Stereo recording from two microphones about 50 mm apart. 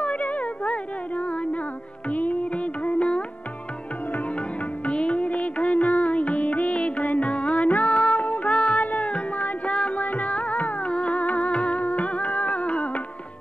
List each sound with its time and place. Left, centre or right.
0.0 s music: left
4.8 s music: left
10.0 s music: left